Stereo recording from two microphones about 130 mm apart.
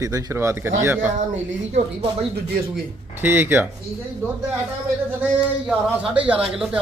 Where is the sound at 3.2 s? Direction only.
15° right (ahead or behind).